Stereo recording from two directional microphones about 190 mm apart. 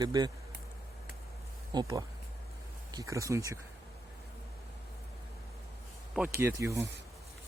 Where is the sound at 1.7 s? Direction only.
15° right (ahead or behind).